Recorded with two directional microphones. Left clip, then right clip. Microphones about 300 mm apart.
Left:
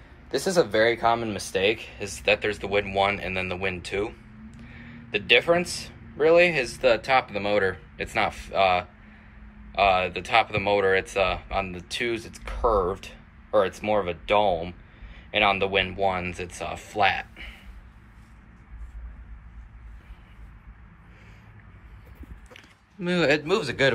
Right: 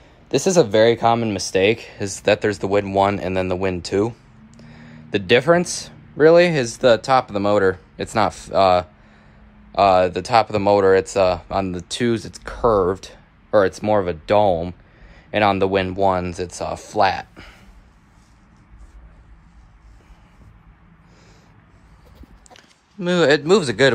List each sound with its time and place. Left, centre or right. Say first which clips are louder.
0.3 s speech: right 7 dB; right
4.6 s a sound: right 3 dB; right
5.4 s speech: right 6 dB; right
13.9 s speech: right 5 dB; right
14.5 s speech: right 6 dB; right
15.1 s speech: right 5 dB; right
15.9 s speech: right 7 dB; centre
17.2 s speech: right 2 dB; right
22.5 s speech: right 3 dB; centre